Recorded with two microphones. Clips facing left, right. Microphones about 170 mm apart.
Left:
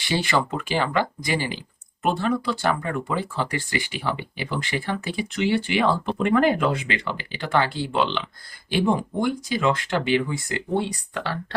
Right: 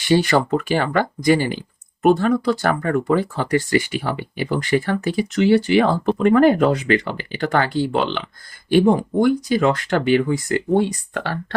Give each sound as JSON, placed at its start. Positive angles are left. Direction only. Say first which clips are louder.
{"t": 0.0, "sound": "speech", "louder": "right 7 dB", "side_deg": -45}